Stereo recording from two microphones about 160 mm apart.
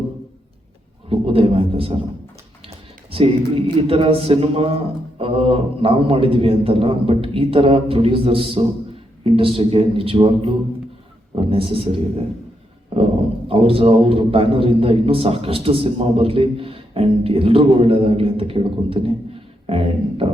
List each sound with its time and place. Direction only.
1.1 s a man's voice: 35° right (ahead or behind)
3.1 s a man's voice: 35° right (ahead or behind)
13.5 s a man's voice: 35° right (ahead or behind)